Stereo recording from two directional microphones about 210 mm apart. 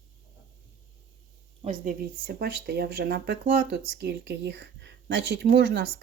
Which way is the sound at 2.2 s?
50° right (ahead or behind).